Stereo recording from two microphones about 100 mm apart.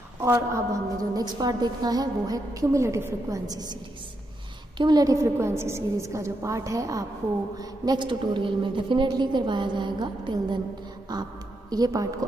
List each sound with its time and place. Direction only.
0.2 s a woman's voice: 30° right (ahead or behind)
4.7 s a woman's voice: 45° right (ahead or behind)